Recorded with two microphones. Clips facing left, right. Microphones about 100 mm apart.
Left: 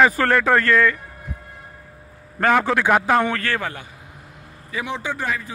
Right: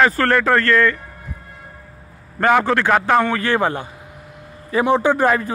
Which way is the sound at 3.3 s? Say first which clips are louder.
Right 7 dB; 20° right (ahead or behind).